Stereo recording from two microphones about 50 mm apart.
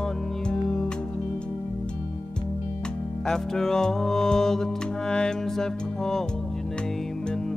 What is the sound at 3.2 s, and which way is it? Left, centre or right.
Music, centre.